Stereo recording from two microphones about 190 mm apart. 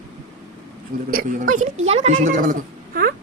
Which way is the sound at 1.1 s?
40° right (ahead or behind).